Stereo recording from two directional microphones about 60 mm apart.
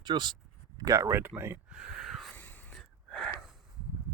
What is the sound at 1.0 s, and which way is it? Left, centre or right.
Speech, right.